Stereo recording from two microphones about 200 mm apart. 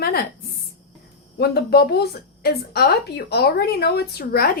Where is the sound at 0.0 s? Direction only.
50° left (ahead or behind).